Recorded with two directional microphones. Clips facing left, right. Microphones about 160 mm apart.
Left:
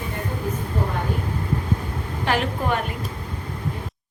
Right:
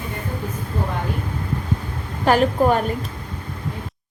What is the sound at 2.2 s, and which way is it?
Speech, 40° right (ahead or behind).